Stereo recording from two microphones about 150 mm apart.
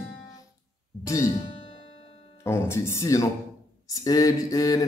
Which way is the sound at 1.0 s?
20° left (ahead or behind).